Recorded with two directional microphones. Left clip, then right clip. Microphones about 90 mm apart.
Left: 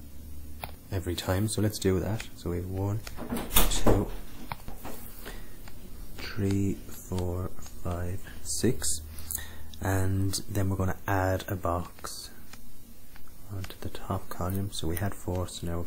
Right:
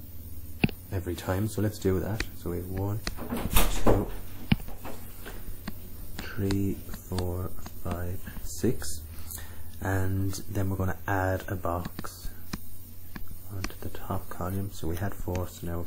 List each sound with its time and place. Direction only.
0.8 s speech: 20° left (ahead or behind)
4.8 s a sound: 20° left (ahead or behind)
6.2 s speech: 25° left (ahead or behind)
13.7 s speech: 25° left (ahead or behind)